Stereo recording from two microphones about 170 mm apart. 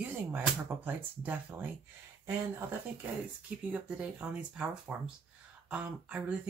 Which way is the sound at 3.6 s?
5° right (ahead or behind).